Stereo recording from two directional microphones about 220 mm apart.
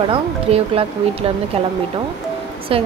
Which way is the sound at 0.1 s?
25° right (ahead or behind).